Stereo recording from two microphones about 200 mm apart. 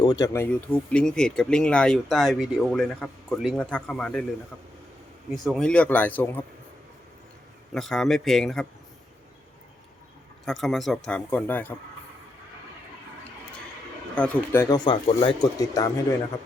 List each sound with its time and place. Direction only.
0.0 s speech: 20° left (ahead or behind)
5.4 s speech: centre (ahead or behind)
7.7 s speech: centre (ahead or behind)
10.4 s speech: centre (ahead or behind)
14.2 s speech: 10° left (ahead or behind)
14.8 s speech: 25° left (ahead or behind)